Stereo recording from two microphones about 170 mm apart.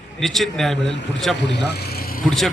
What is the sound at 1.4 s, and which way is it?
Speech, 90° left.